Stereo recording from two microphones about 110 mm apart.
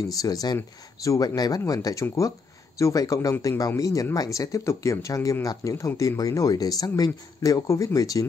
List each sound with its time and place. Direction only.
0.1 s speech: 35° left (ahead or behind)